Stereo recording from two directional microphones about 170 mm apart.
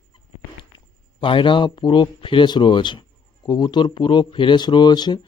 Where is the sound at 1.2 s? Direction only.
30° left (ahead or behind).